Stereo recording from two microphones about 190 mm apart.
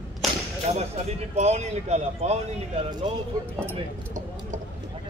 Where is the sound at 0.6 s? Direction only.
35° right (ahead or behind).